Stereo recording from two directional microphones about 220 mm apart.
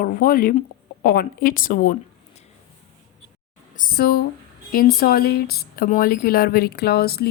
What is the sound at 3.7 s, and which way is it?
Speech, 40° left (ahead or behind).